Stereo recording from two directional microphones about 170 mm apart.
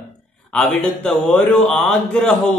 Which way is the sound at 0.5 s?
5° left (ahead or behind).